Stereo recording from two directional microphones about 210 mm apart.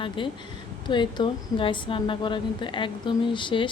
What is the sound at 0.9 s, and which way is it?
A woman's voice, 20° left (ahead or behind).